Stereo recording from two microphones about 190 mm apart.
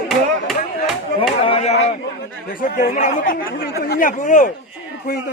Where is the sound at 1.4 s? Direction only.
30° left (ahead or behind).